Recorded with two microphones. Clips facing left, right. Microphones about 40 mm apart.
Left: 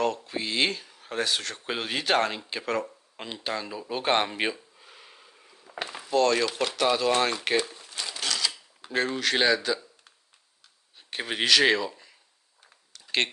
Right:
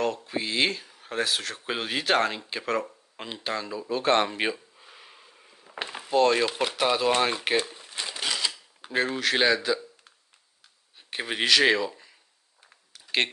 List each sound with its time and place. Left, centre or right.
0.0 s speech: centre
3.9 s a sound: centre
5.8 s a sound: right
6.1 s speech: centre
7.3 s typewriter: centre
8.9 s speech: centre
13.0 s computer keyboard: centre